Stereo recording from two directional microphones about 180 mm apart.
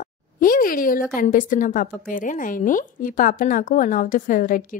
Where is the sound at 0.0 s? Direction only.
50° left (ahead or behind).